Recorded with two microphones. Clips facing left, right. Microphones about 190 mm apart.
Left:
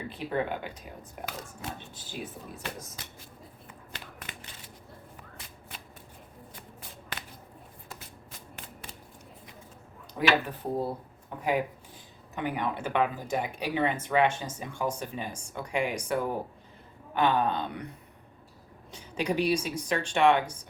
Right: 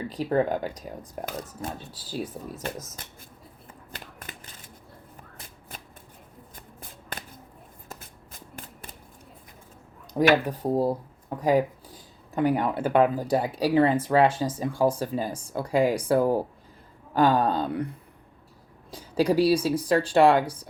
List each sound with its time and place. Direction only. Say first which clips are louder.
0.1 s speech: right 7 dB; 40° right (ahead or behind)
3.7 s a sound: right 3 dB; 45° right (ahead or behind)
7.9 s shuffling cards: right 3 dB; 45° right (ahead or behind)
10.2 s speech: right 6 dB; 40° right (ahead or behind)
12.3 s speech: right 8 dB; 35° right (ahead or behind)
18.9 s a sound: right 7 dB; 35° right (ahead or behind)
19.6 s speech: right 8 dB; 35° right (ahead or behind)